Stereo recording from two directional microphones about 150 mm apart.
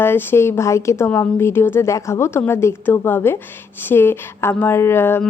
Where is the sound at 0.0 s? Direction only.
15° left (ahead or behind).